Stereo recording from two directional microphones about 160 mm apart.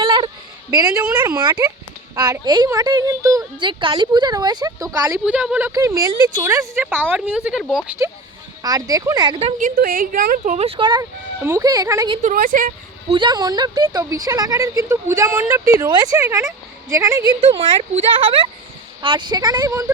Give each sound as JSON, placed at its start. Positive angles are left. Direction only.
{"t": 0.0, "sound": "a sound", "side_deg": -30}
{"t": 0.7, "sound": "a woman's voice", "side_deg": -20}
{"t": 5.2, "sound": "a woman's voice", "side_deg": -5}
{"t": 8.6, "sound": "a woman's voice", "side_deg": -20}
{"t": 9.6, "sound": "speech", "side_deg": -60}
{"t": 11.4, "sound": "a woman's voice", "side_deg": -20}
{"t": 12.2, "sound": "speech", "side_deg": -60}
{"t": 13.1, "sound": "a woman's voice", "side_deg": -30}
{"t": 17.4, "sound": "a woman's voice", "side_deg": -35}